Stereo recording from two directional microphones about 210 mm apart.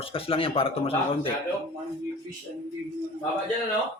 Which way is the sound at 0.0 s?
25° left (ahead or behind).